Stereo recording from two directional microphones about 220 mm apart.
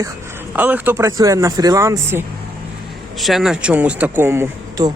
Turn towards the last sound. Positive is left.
turn(degrees=-15)  # may be behind; listen again after turning